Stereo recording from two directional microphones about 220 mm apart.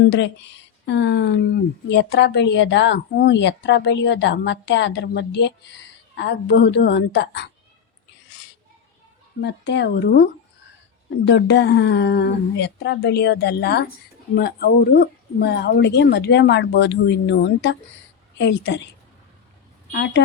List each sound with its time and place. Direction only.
0.0 s speech: 50° left (ahead or behind)
9.4 s speech: 50° left (ahead or behind)
11.3 s speech: 50° left (ahead or behind)
19.9 s speech: 50° left (ahead or behind)